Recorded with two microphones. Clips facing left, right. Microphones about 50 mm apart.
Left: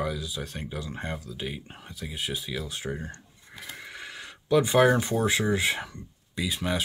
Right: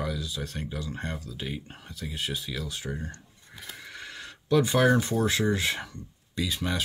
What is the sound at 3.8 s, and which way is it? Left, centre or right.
Speech, centre.